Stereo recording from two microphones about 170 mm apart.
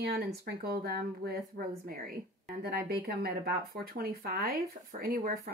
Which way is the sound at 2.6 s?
65° right (ahead or behind).